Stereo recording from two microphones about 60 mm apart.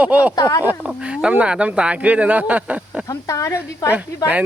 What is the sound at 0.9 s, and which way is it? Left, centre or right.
Speech, centre.